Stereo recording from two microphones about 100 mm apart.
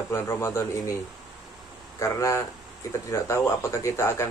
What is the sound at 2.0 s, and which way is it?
Speech, 30° left (ahead or behind).